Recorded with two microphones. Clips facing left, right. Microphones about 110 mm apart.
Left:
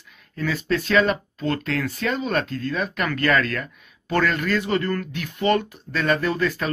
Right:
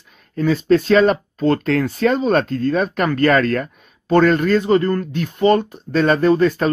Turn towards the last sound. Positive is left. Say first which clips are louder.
# right 9 dB
turn(degrees=-30)  # may be behind; listen again after turning